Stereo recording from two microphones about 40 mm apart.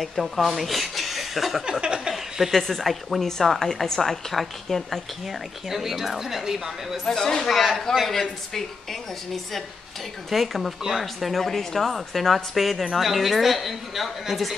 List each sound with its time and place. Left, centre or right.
0.0 s speech: centre
1.7 s a sound: right
2.1 s chuckle: centre
2.6 s speech: centre
3.3 s a woman's voice: centre
5.7 s speech: centre
7.1 s a woman's voice: centre
10.3 s speech: centre
10.8 s speech: centre
11.1 s speech: centre